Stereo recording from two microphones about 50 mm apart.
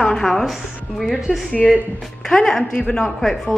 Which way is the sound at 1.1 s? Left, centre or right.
Centre.